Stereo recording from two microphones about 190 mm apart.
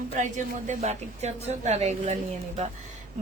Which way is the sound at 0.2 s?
40° right (ahead or behind).